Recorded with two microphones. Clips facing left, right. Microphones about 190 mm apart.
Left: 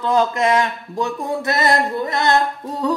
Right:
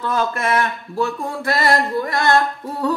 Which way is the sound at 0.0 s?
15° left (ahead or behind).